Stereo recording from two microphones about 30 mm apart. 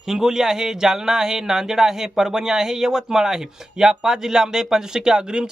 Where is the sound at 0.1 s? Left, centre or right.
Centre.